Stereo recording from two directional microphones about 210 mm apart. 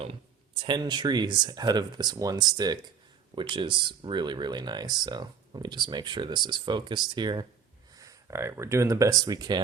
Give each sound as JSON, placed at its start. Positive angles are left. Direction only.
{"t": 0.6, "sound": "speech", "side_deg": -20}